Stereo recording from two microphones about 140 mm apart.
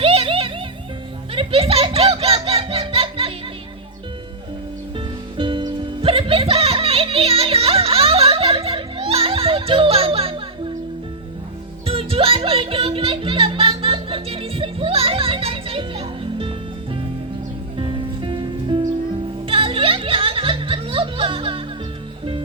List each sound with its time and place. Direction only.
0.0 s music: 40° right (ahead or behind)
4.9 s music: 35° right (ahead or behind)
11.9 s music: 40° right (ahead or behind)